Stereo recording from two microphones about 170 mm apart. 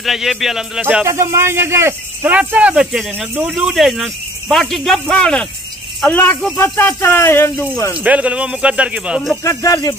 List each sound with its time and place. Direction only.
0.0 s speech: centre (ahead or behind)
1.0 s speech: 15° right (ahead or behind); by 7.6 s 15° left (ahead or behind)
7.9 s speech: 10° right (ahead or behind)
9.4 s speech: 20° left (ahead or behind)